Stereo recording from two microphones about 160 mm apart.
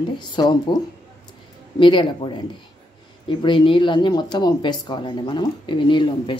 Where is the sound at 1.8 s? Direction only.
30° left (ahead or behind).